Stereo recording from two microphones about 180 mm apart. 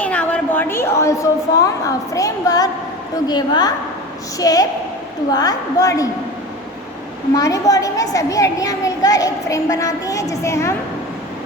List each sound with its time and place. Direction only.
0.0 s a woman's voice: 10° left (ahead or behind)
7.3 s a woman's voice: 20° left (ahead or behind)